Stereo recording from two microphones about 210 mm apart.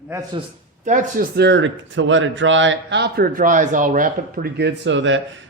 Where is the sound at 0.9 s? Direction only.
35° right (ahead or behind).